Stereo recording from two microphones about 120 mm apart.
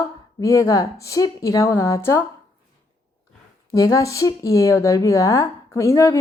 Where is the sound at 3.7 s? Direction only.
30° left (ahead or behind).